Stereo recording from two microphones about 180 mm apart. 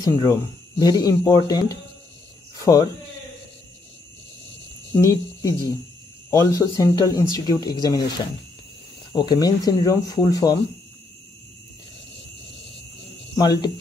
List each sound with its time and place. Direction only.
0.0 s speech: 20° left (ahead or behind)
5.0 s speech: 20° left (ahead or behind)
9.1 s speech: 20° left (ahead or behind)
13.4 s speech: 20° left (ahead or behind)